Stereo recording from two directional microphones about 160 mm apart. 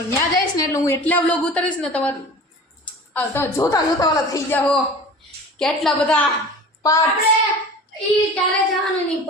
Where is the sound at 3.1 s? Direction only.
15° left (ahead or behind).